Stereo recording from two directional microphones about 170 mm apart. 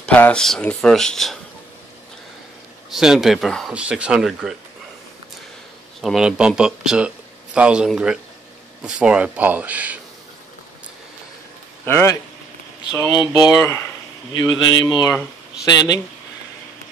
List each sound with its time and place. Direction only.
0.0 s speech: 5° left (ahead or behind)
2.9 s speech: centre (ahead or behind)
5.9 s speech: centre (ahead or behind)
11.8 s a man's voice: 15° left (ahead or behind)